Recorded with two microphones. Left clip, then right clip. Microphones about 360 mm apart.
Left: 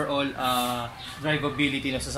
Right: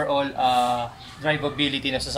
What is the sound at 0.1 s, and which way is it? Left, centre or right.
Speech, right.